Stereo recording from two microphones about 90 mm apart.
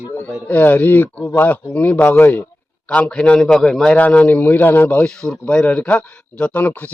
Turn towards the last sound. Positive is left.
turn(degrees=20)  # may be behind; listen again after turning